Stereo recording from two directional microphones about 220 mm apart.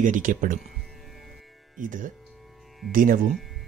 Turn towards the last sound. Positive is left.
turn(degrees=-40)  # may be behind; listen again after turning